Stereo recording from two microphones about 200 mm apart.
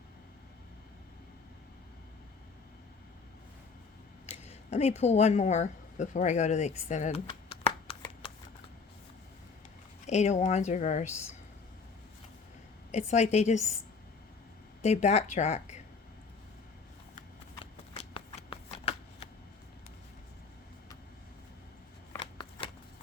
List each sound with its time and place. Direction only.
4.3 s speech: 30° left (ahead or behind)
7.3 s shuffling cards: 30° left (ahead or behind)
10.1 s a woman's voice: 35° left (ahead or behind)
12.9 s a woman's voice: 35° left (ahead or behind)
14.8 s a woman's voice: 35° left (ahead or behind)
17.6 s shuffling cards: 30° left (ahead or behind)
22.2 s shuffling cards: 25° left (ahead or behind)